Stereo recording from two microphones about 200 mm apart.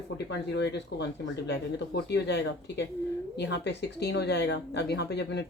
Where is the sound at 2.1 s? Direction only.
60° left (ahead or behind).